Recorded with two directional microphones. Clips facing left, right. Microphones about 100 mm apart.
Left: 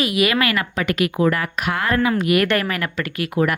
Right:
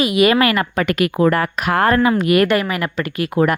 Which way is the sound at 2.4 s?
15° right (ahead or behind).